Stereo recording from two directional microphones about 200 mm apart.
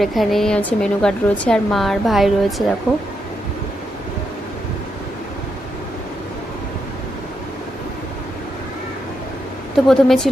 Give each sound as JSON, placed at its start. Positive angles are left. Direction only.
{"t": 0.0, "sound": "speech", "side_deg": 0}
{"t": 9.8, "sound": "speech", "side_deg": 0}